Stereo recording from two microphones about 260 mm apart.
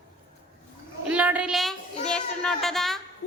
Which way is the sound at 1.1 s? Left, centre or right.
Centre.